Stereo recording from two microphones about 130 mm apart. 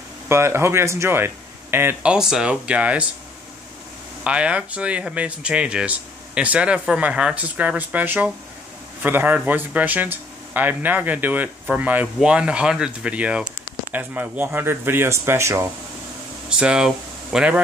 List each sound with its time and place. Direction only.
0.3 s speech: 20° right (ahead or behind)
2.1 s speech: 5° right (ahead or behind)
4.2 s speech: 10° right (ahead or behind)
16.4 s speech: 5° right (ahead or behind)